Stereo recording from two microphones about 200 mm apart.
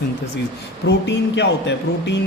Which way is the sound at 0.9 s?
60° left (ahead or behind).